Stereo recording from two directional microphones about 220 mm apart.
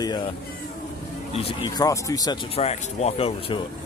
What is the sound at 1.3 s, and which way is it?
Speech, 25° left (ahead or behind).